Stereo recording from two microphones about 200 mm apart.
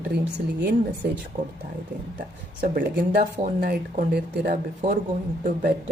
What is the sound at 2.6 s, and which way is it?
Speech, 45° right (ahead or behind).